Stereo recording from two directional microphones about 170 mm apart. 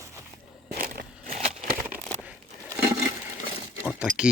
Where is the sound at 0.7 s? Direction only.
60° right (ahead or behind).